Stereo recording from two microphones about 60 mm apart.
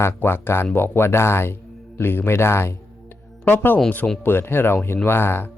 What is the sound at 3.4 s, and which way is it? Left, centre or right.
Speech, left.